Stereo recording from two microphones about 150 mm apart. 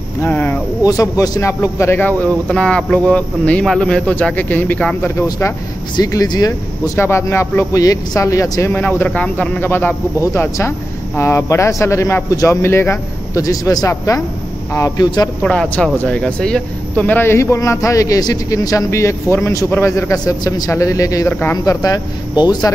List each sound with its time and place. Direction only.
0.2 s speech: 10° left (ahead or behind)
0.8 s a man's voice: 25° left (ahead or behind)
5.9 s a man's voice: 25° left (ahead or behind)
15.4 s speech: 5° left (ahead or behind)
21.8 s speech: 25° left (ahead or behind)